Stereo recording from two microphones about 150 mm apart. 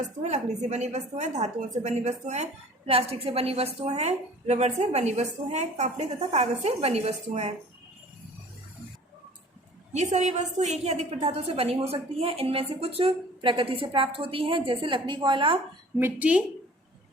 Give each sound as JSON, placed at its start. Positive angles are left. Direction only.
{"t": 0.2, "sound": "a woman's voice", "side_deg": -50}
{"t": 9.9, "sound": "a woman's voice", "side_deg": -50}
{"t": 16.0, "sound": "a woman's voice", "side_deg": -15}